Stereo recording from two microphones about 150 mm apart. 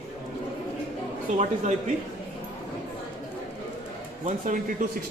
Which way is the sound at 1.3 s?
50° right (ahead or behind).